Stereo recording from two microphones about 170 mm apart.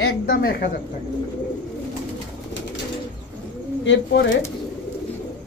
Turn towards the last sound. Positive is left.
turn(degrees=90)